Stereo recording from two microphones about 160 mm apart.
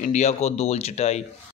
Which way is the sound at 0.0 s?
45° left (ahead or behind).